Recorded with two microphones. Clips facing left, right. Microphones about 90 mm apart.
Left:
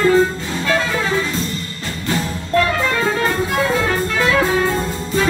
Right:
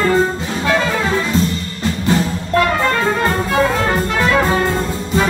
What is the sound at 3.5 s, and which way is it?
Music, 20° right (ahead or behind).